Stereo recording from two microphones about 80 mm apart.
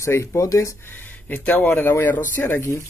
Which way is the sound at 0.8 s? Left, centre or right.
Left.